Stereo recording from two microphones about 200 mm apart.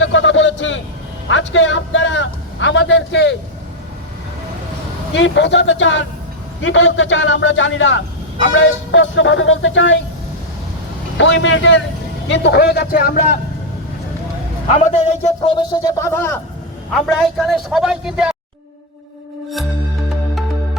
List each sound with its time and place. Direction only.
0.0 s a sound: 70° left (ahead or behind)
5.1 s a man's voice: 65° left (ahead or behind)
11.2 s a man's voice: 70° left (ahead or behind); by 13.4 s 45° left (ahead or behind)
14.7 s a man's voice: 35° left (ahead or behind); by 16.3 s 15° left (ahead or behind)
16.9 s a man's voice: centre (ahead or behind)